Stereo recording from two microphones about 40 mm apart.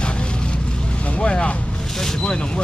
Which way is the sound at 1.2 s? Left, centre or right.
Left.